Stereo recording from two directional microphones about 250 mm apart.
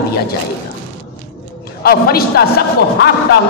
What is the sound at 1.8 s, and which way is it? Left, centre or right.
A man's voice, left.